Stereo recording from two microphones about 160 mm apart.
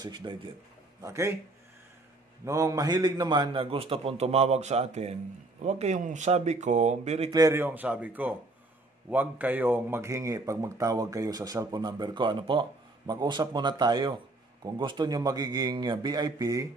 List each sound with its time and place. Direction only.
0.0 s speech: 30° right (ahead or behind)
1.0 s speech: 15° right (ahead or behind)
2.4 s a man's voice: 20° right (ahead or behind); by 7.2 s 45° right (ahead or behind)
7.2 s speech: 20° right (ahead or behind)